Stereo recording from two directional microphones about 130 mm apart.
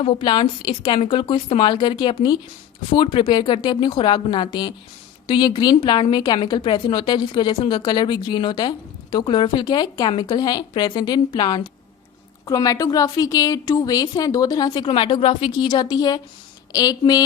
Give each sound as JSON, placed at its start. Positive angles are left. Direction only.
{"t": 0.0, "sound": "a woman's voice", "side_deg": 40}